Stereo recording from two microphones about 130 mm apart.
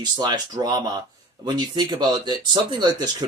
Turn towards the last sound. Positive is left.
turn(degrees=-35)  # may be behind; listen again after turning